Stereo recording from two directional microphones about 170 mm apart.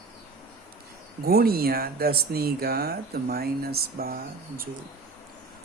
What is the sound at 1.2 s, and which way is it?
Speech, 65° right (ahead or behind).